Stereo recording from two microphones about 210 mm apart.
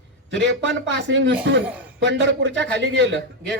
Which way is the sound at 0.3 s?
60° right (ahead or behind).